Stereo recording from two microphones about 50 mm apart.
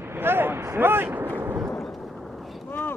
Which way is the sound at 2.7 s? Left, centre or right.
Left.